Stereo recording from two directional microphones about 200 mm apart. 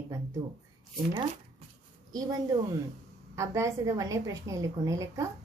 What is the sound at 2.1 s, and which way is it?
A woman's voice, 20° right (ahead or behind).